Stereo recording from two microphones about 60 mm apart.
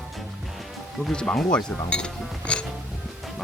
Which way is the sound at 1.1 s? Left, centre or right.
Centre.